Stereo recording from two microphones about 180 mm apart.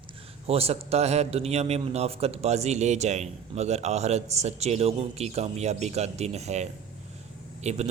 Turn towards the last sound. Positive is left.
turn(degrees=-40)  # may be behind; listen again after turning